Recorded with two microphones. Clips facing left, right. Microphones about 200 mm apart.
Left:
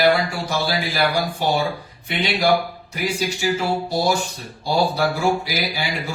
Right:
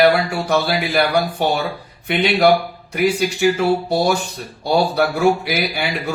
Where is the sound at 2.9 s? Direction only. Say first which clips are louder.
Right 7 dB; 60° right (ahead or behind).